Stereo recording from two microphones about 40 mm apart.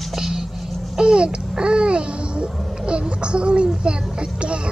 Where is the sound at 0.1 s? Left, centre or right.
Centre.